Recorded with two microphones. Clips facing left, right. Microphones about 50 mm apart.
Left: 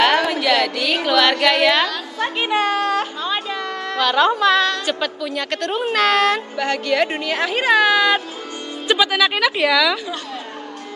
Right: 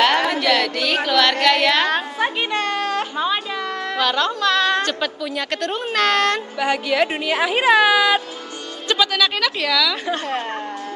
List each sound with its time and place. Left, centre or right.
0.3 s a sound: centre
1.4 s speech: centre
2.5 s a sound: centre
3.9 s speech: centre
4.2 s a woman's voice: centre
8.8 s speech: centre